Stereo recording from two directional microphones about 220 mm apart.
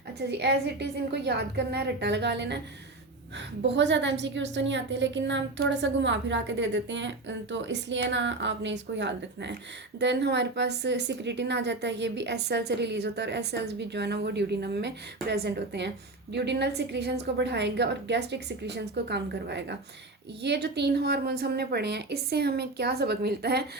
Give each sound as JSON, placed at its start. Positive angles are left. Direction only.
{"t": 0.3, "sound": "a woman's voice", "side_deg": -50}